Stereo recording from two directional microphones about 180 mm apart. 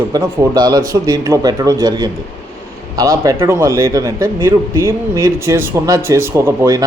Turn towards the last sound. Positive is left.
turn(degrees=-20)  # may be behind; listen again after turning